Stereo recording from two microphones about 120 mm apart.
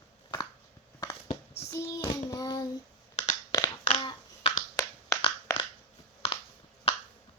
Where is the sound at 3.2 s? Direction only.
70° left (ahead or behind).